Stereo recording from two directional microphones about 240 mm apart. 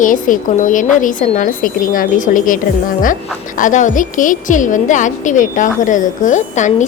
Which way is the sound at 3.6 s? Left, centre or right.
Left.